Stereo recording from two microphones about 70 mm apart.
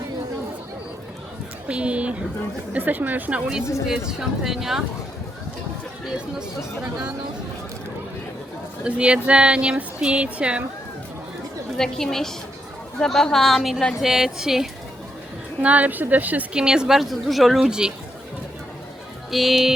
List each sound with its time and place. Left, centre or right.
1.6 s a woman's voice: centre
3.8 s a woman's voice: centre
8.8 s speech: centre
11.8 s a woman's voice: centre
15.6 s speech: right
16.6 s a woman's voice: centre
19.3 s a woman's voice: centre